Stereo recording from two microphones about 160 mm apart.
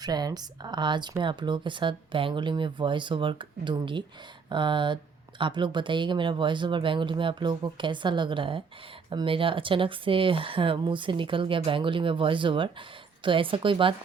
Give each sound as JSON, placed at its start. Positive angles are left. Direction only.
{"t": 0.0, "sound": "speech", "side_deg": -25}